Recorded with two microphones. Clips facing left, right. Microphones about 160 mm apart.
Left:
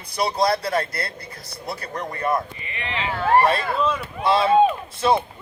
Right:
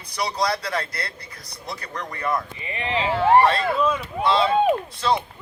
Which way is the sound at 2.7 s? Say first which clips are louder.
Right 5 dB; 35° right (ahead or behind).